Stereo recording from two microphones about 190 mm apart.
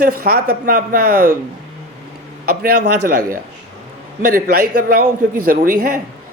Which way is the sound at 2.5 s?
55° right (ahead or behind).